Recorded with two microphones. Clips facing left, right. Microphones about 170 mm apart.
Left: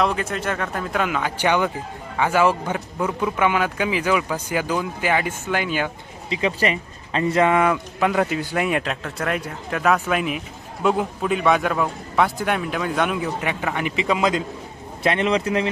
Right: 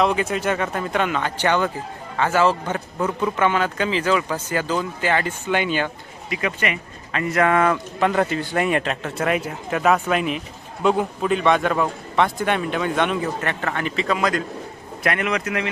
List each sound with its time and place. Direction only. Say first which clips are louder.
0.0 s a man's voice: right 2 dB; centre (ahead or behind)
6.3 s speech: left 3 dB; 30° left (ahead or behind)
7.5 s a man's voice: even; 10° left (ahead or behind); by 15.7 s 30° left (ahead or behind)